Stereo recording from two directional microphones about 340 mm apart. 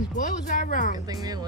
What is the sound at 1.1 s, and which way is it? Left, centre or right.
Speech, centre.